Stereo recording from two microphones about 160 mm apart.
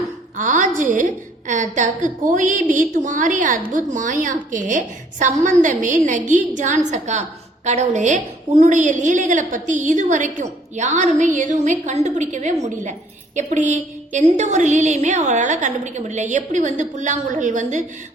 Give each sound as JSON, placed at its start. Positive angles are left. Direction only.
{"t": 0.3, "sound": "a woman's voice", "side_deg": -55}